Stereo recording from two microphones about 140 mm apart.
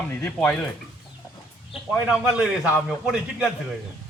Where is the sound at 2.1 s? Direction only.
5° right (ahead or behind).